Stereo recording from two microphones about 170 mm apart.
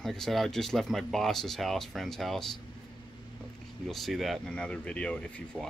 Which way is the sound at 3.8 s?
Centre (ahead or behind).